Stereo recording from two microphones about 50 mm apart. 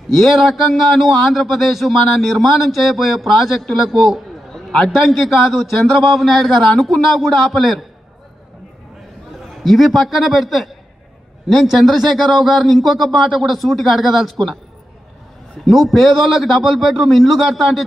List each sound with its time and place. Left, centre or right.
0.1 s a man's voice: centre
9.6 s speech: centre
15.6 s speech: centre